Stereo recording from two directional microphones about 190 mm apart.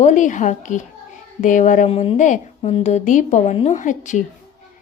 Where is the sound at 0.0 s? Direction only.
40° left (ahead or behind).